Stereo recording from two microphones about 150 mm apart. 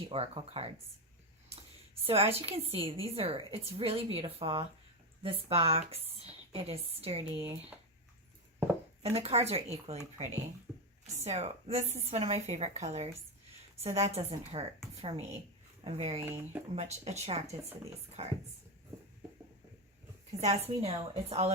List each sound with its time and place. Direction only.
0.1 s a woman's voice: 40° right (ahead or behind)
2.0 s a woman's voice: 40° right (ahead or behind)
9.0 s a woman's voice: 45° right (ahead or behind)
11.1 s a woman's voice: 50° right (ahead or behind)
16.2 s speech: 15° right (ahead or behind)
16.7 s a woman's voice: 45° right (ahead or behind)
20.4 s a woman's voice: 45° right (ahead or behind)